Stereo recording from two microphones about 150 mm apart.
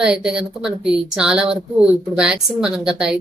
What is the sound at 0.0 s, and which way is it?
Speech, 5° right (ahead or behind).